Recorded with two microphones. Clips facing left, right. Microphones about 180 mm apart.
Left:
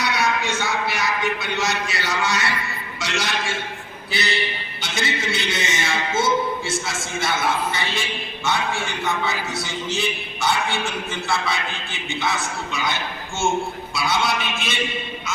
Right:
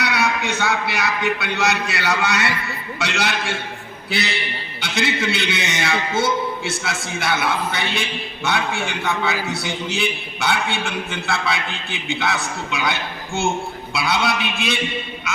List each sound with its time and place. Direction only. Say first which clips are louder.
0.0 s a man's voice: right 1 dB; 65° right (ahead or behind)
4.8 s a man's voice: right 4 dB; 60° right (ahead or behind)